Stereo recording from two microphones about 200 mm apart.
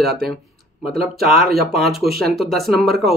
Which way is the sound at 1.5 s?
Centre (ahead or behind).